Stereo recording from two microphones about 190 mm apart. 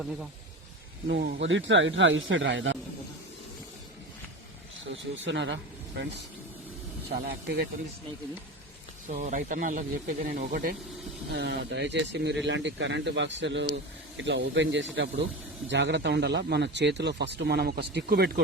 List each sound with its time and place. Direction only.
1.0 s a man's voice: 60° right (ahead or behind); by 2.7 s 75° right (ahead or behind)
4.9 s speech: 70° right (ahead or behind)
7.1 s a man's voice: 60° right (ahead or behind)
9.0 s speech: 40° right (ahead or behind)
11.3 s a man's voice: 60° right (ahead or behind)